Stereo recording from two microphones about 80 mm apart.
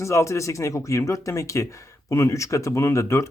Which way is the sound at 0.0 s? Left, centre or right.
Left.